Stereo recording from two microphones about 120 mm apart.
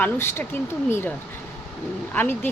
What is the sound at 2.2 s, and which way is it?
Speech, 15° left (ahead or behind).